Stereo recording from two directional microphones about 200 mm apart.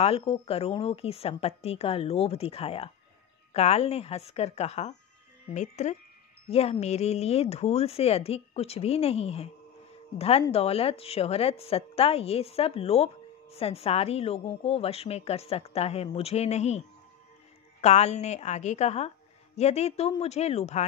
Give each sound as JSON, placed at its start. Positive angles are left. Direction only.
{"t": 0.0, "sound": "a woman's voice", "side_deg": 30}